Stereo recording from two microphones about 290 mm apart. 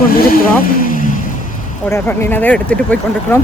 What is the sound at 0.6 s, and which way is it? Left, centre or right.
Vehicle, left.